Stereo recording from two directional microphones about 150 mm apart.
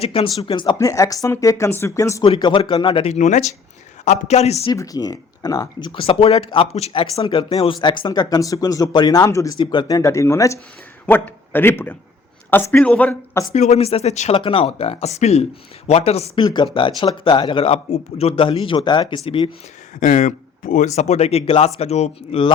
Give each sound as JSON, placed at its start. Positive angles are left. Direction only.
{"t": 0.0, "sound": "speech", "side_deg": 40}
{"t": 0.4, "sound": "speech", "side_deg": 30}
{"t": 2.2, "sound": "speech", "side_deg": 35}
{"t": 3.1, "sound": "speech", "side_deg": 55}
{"t": 4.7, "sound": "speech", "side_deg": 25}
{"t": 6.0, "sound": "a man's voice", "side_deg": 40}
{"t": 13.5, "sound": "speech", "side_deg": 50}
{"t": 20.0, "sound": "speech", "side_deg": 55}